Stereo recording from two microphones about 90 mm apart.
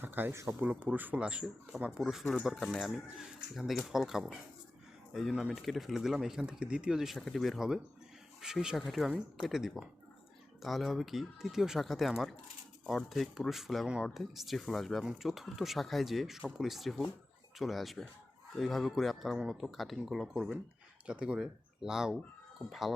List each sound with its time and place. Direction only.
0.0 s speech: 20° right (ahead or behind); by 23.0 s centre (ahead or behind)